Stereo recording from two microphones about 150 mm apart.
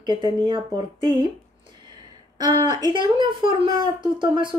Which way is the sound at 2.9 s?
30° right (ahead or behind).